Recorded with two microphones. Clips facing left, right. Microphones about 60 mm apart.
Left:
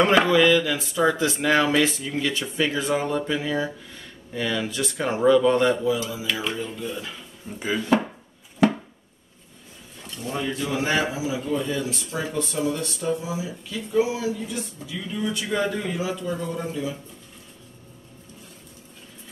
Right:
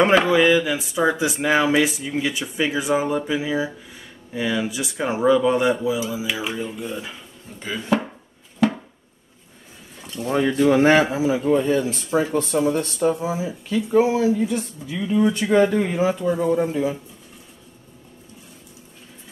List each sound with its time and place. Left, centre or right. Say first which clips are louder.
0.2 s speech: right 1 dB; centre
7.5 s speech: left 3 dB; centre
10.2 s speech: right 10 dB; right
15.0 s speech: right 11 dB; right
15.2 s speech: right 7 dB; right